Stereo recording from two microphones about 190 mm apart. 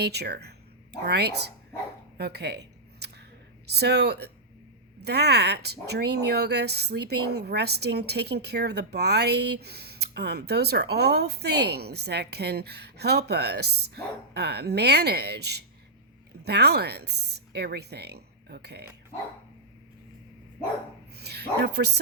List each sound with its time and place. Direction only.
0.0 s speech: 60° right (ahead or behind)
2.1 s a sound: 60° right (ahead or behind)
3.7 s speech: 60° right (ahead or behind)
21.2 s speech: 60° right (ahead or behind)